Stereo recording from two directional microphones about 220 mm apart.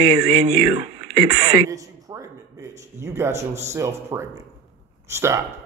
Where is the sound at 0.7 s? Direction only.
30° right (ahead or behind).